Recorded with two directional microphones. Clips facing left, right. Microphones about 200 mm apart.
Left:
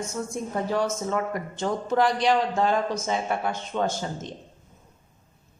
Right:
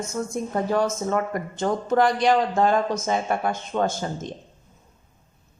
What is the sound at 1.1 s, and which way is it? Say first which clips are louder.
A man's voice: right 3 dB; 50° right (ahead or behind).